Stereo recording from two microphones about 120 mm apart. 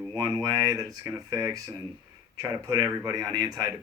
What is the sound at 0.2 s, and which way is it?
Speech, 30° right (ahead or behind).